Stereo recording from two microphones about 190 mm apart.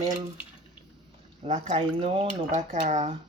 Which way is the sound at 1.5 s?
40° right (ahead or behind).